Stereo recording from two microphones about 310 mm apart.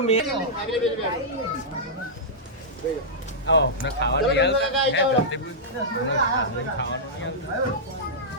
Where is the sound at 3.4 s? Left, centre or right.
Left.